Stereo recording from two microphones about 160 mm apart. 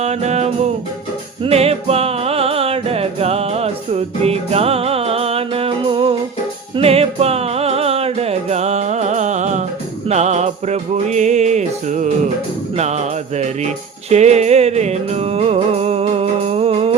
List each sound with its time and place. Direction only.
0.0 s music: 45° right (ahead or behind)